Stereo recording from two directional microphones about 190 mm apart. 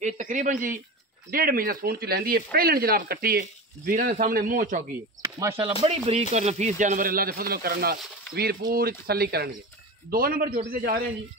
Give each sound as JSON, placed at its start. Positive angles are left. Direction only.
{"t": 0.0, "sound": "speech", "side_deg": -40}
{"t": 5.2, "sound": "speech", "side_deg": -15}
{"t": 5.8, "sound": "speech", "side_deg": -30}